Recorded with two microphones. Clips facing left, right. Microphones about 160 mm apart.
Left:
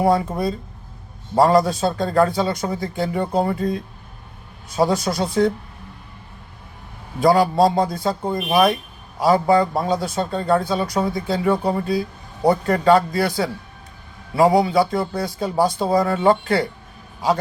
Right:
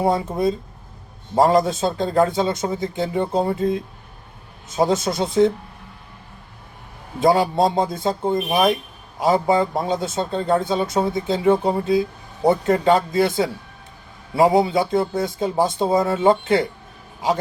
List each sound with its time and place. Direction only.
0.0 s speech: 25° right (ahead or behind)
1.4 s speech: 20° right (ahead or behind)
7.2 s speech: 20° right (ahead or behind)